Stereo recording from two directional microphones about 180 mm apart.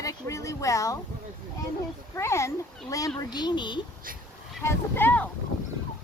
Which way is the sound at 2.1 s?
15° left (ahead or behind).